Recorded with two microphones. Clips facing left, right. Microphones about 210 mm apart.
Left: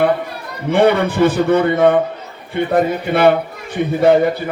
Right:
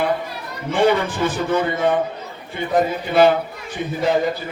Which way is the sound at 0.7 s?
60° left (ahead or behind).